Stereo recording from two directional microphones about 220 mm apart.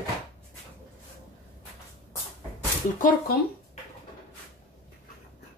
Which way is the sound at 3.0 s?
40° left (ahead or behind).